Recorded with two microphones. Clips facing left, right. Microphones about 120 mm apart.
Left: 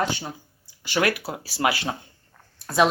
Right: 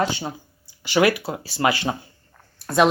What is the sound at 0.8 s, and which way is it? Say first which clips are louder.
Speech: right 5 dB; 20° right (ahead or behind).